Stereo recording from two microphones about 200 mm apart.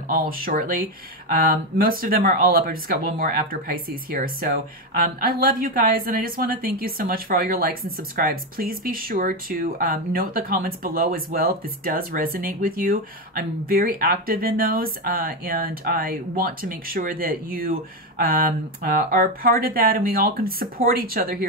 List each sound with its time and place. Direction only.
0.1 s a woman's voice: 45° right (ahead or behind)